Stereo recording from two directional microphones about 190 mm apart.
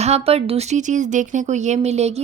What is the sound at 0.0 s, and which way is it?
Speech, 35° right (ahead or behind).